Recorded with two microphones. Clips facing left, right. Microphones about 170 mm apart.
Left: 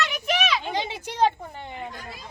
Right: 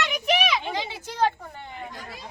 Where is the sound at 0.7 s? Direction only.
25° left (ahead or behind).